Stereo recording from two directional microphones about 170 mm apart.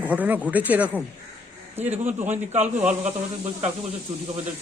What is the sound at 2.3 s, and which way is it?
Speech, 40° right (ahead or behind).